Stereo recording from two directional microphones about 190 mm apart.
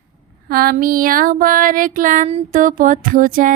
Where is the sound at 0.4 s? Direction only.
50° right (ahead or behind).